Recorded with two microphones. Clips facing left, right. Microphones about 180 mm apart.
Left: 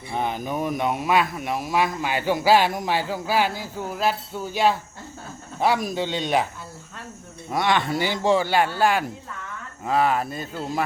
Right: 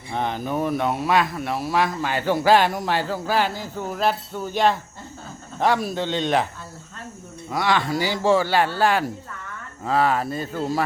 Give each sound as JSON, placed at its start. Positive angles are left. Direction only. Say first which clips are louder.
{"t": 0.2, "sound": "speech", "louder": "right 2 dB", "side_deg": 10}
{"t": 7.5, "sound": "speech", "louder": "even", "side_deg": 20}